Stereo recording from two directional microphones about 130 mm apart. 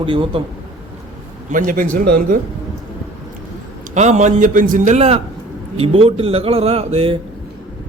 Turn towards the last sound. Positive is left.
turn(degrees=-45)  # may be behind; listen again after turning